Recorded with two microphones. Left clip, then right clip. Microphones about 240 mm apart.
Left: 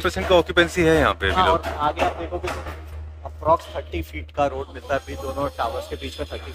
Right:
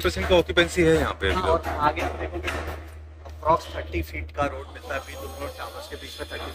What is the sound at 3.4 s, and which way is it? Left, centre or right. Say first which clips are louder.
Speech: left 2 dB; left.